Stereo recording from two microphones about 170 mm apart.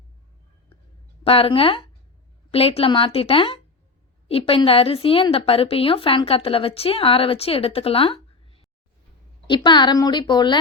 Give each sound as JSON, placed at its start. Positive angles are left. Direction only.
{"t": 1.2, "sound": "a woman's voice", "side_deg": 35}